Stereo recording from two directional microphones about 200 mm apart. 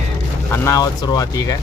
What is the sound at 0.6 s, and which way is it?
Speech, 15° left (ahead or behind).